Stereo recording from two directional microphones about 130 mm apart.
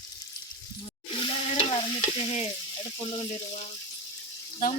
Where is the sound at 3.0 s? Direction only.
40° left (ahead or behind).